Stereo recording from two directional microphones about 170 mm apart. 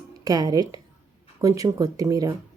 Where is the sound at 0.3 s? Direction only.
20° right (ahead or behind).